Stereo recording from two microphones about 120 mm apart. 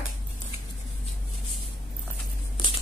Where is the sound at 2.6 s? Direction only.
40° left (ahead or behind).